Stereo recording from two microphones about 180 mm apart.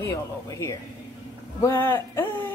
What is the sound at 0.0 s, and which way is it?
Speech, 15° left (ahead or behind).